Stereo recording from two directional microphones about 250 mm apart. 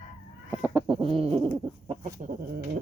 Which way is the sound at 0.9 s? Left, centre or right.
Right.